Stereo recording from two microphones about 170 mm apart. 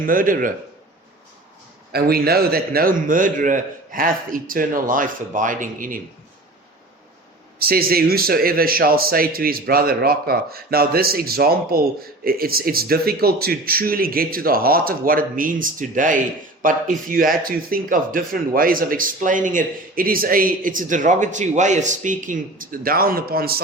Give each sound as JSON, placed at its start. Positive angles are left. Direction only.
{"t": 0.0, "sound": "a man's voice", "side_deg": -55}
{"t": 1.9, "sound": "a man's voice", "side_deg": -65}
{"t": 7.6, "sound": "a man's voice", "side_deg": -60}